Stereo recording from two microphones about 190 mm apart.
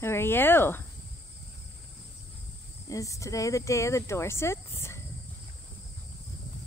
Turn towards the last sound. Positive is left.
turn(degrees=15)  # may be behind; listen again after turning